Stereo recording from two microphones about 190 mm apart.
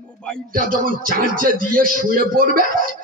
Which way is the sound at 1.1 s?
45° right (ahead or behind).